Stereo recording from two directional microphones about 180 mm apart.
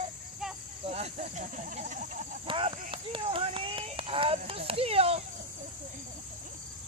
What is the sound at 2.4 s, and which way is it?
Speech, 30° right (ahead or behind).